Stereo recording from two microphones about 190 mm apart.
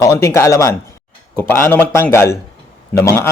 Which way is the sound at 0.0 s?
15° left (ahead or behind).